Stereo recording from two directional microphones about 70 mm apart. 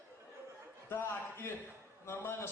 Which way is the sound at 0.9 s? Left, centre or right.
Left.